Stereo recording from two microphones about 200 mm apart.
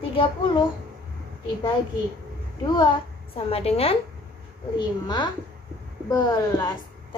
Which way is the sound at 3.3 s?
30° left (ahead or behind).